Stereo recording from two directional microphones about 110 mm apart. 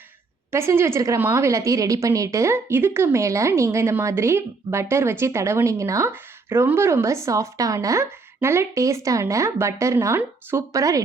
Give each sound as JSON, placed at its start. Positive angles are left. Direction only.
{"t": 0.5, "sound": "a woman's voice", "side_deg": -25}